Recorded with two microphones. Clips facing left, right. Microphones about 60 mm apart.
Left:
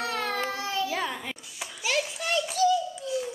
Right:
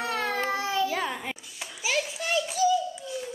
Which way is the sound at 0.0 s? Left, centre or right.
Centre.